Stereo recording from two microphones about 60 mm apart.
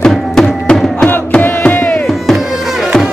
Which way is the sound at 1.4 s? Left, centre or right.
Left.